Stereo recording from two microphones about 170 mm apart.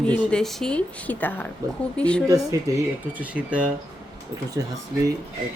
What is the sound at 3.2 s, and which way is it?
Speech, 10° right (ahead or behind).